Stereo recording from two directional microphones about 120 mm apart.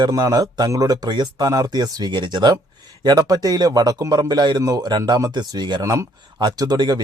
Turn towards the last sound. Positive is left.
turn(degrees=-35)  # may be behind; listen again after turning